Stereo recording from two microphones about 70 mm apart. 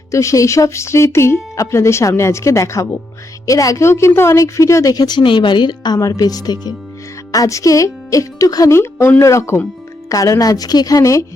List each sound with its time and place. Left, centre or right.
0.1 s speech: left
5.0 s a woman's voice: left
6.0 s speech: left
7.3 s speech: left
8.7 s speech: left